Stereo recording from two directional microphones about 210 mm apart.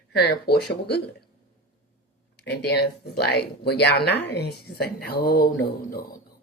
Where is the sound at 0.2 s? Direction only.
50° left (ahead or behind).